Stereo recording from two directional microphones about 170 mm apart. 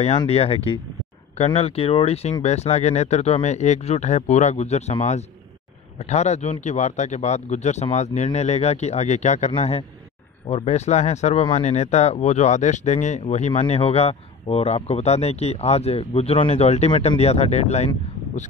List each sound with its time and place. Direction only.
0.3 s speech: 35° left (ahead or behind)